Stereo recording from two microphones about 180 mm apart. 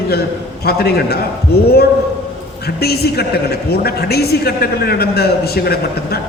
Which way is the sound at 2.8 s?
60° left (ahead or behind).